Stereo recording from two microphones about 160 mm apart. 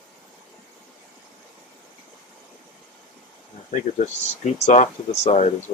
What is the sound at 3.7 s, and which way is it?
Speech, 45° left (ahead or behind).